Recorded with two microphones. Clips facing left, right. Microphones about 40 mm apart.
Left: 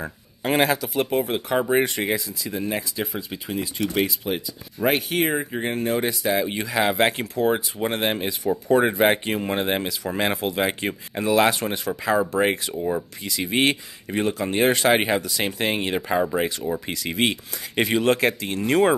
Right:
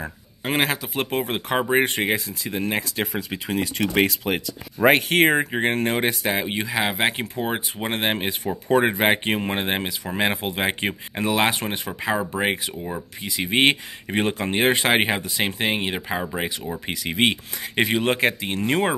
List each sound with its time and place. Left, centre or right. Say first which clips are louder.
0.0 s a sound: left 2 dB; centre
0.6 s speech: left 2 dB; right
1.1 s speech: even; right
3.2 s speech: right 3 dB; right
5.5 s speech: right 2 dB; right
6.4 s speech: left 2 dB; right
12.3 s speech: left 2 dB; centre
13.6 s speech: right 3 dB; right
14.5 s speech: left 1 dB; right